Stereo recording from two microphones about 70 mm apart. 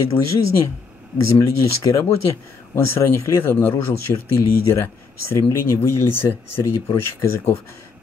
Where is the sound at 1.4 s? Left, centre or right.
Left.